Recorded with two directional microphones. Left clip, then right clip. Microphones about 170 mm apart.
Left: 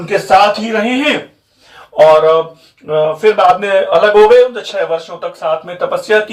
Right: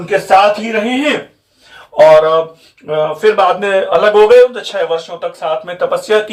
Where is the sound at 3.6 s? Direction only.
35° right (ahead or behind).